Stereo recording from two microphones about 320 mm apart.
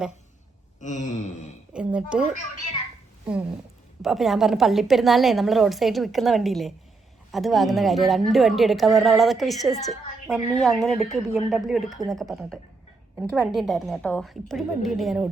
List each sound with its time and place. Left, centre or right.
0.8 s a sound: left
1.7 s a woman's voice: centre
4.0 s a woman's voice: centre